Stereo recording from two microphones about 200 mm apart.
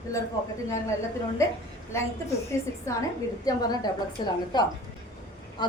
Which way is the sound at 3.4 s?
20° left (ahead or behind).